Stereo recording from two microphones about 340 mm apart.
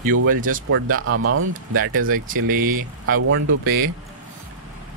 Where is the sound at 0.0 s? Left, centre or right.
Right.